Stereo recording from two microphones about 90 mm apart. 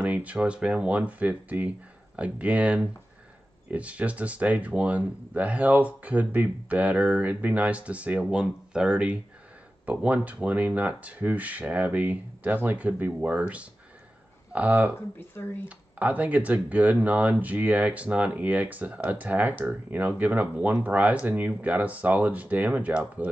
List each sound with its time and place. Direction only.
0.0 s speech: 15° right (ahead or behind)
15.0 s speech: 25° left (ahead or behind)
16.0 s speech: 15° right (ahead or behind)